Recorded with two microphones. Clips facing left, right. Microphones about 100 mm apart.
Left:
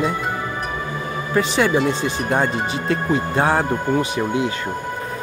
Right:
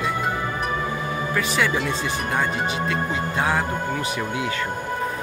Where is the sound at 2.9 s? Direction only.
40° left (ahead or behind).